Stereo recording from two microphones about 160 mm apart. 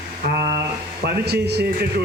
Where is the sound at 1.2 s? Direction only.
90° right.